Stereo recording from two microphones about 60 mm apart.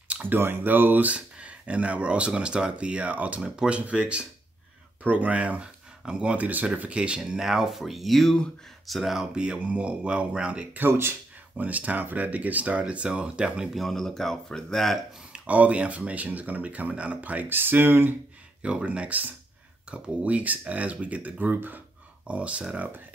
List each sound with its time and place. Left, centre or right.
0.2 s speech: right
1.1 s speech: right
10.6 s speech: right
11.5 s speech: right
13.7 s speech: centre
15.3 s speech: right
18.6 s speech: centre
22.2 s speech: right